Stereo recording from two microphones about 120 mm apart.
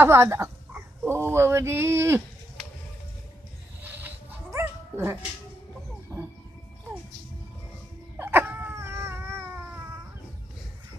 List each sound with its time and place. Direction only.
0.0 s speech: 20° right (ahead or behind)
3.8 s dog: 15° right (ahead or behind)
6.1 s bird: 20° right (ahead or behind)
8.2 s a sound: 15° right (ahead or behind)